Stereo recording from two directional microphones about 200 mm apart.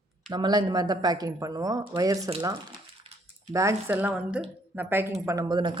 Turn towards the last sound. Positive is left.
turn(degrees=-20)  # may be behind; listen again after turning